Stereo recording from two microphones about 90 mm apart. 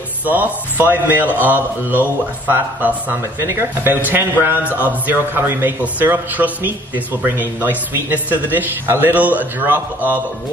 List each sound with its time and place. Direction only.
0.2 s a man's voice: 20° right (ahead or behind)